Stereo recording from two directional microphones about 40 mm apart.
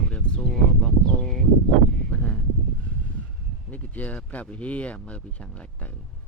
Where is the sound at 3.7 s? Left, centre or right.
Left.